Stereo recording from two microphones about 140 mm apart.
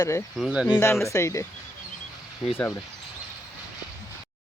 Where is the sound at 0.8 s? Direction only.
20° left (ahead or behind).